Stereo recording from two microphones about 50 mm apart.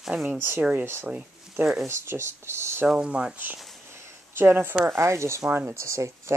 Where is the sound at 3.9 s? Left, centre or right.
Right.